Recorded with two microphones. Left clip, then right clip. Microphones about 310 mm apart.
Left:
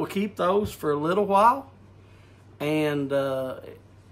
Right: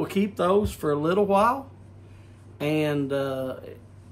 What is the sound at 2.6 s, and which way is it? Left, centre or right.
Speech, centre.